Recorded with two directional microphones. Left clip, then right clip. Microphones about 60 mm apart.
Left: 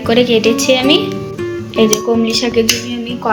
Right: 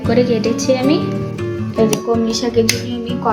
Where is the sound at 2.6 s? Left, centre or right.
Left.